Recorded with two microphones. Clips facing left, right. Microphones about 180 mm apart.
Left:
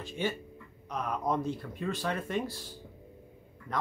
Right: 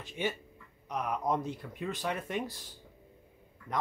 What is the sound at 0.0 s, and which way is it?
Speech, 20° right (ahead or behind).